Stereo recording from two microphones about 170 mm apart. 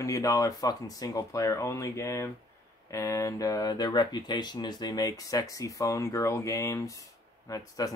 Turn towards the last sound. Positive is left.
turn(degrees=20)  # may be behind; listen again after turning